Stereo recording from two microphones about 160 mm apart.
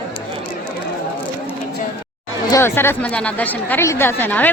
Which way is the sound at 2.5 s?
15° left (ahead or behind).